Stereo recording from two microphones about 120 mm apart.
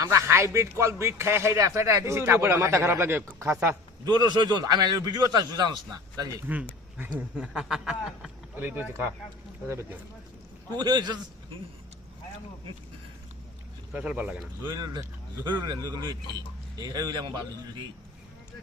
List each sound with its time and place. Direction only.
0.0 s speech: 25° right (ahead or behind)
4.0 s a man's voice: 35° right (ahead or behind)
6.5 s speech: 15° right (ahead or behind)
8.5 s speech: 15° right (ahead or behind)
10.8 s a man's voice: 35° right (ahead or behind)
13.9 s speech: 10° right (ahead or behind)
14.8 s a man's voice: 35° right (ahead or behind)